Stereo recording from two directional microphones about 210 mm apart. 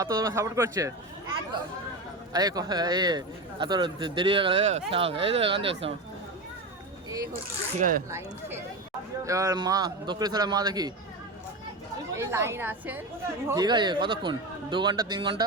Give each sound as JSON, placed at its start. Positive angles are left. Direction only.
{"t": 0.0, "sound": "speech", "side_deg": -15}
{"t": 7.8, "sound": "speech", "side_deg": -40}
{"t": 9.2, "sound": "speech", "side_deg": -15}
{"t": 12.1, "sound": "speech", "side_deg": -15}
{"t": 13.5, "sound": "speech", "side_deg": -20}